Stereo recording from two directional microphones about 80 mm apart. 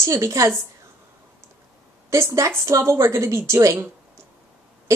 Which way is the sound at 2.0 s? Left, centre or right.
Right.